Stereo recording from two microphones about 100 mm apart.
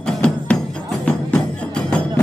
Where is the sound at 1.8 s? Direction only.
10° left (ahead or behind).